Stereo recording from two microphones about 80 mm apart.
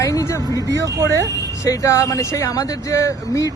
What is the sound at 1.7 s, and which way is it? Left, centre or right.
Speech, left.